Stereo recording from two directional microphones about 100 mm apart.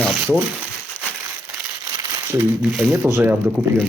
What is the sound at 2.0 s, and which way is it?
Crumpling, 25° right (ahead or behind).